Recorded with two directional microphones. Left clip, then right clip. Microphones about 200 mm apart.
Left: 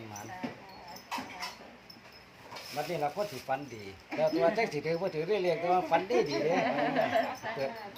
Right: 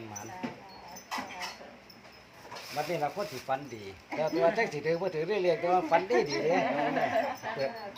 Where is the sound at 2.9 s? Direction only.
5° left (ahead or behind).